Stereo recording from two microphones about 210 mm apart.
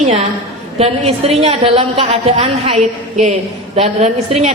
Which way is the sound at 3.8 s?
30° right (ahead or behind).